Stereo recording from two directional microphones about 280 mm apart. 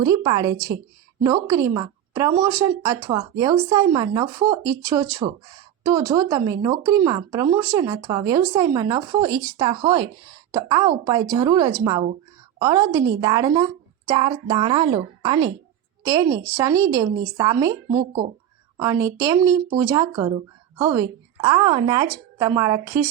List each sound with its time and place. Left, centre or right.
0.0 s a woman's voice: centre
17.8 s speech: right
19.0 s speech: centre